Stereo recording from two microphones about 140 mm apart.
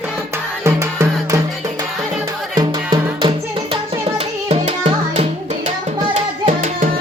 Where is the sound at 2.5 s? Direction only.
30° right (ahead or behind).